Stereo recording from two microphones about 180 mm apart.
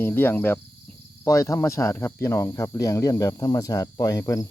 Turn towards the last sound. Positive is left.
turn(degrees=20)  # may be behind; listen again after turning